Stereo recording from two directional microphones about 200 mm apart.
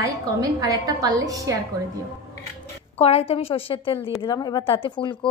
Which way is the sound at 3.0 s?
30° left (ahead or behind).